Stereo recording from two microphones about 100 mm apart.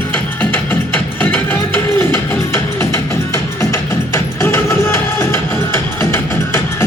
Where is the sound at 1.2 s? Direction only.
15° left (ahead or behind).